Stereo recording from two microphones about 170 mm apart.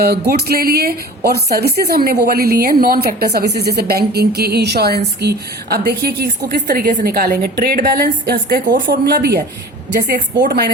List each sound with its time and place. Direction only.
0.0 s a woman's voice: 65° right (ahead or behind)